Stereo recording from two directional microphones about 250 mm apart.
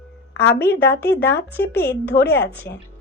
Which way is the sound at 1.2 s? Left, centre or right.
Centre.